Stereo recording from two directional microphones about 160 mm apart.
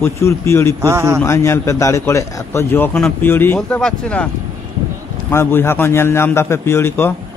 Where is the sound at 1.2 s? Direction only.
15° left (ahead or behind).